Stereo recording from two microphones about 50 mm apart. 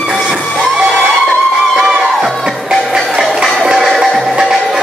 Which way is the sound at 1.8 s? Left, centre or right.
Centre.